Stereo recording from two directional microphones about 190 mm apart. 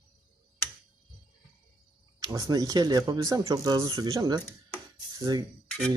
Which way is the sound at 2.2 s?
20° right (ahead or behind).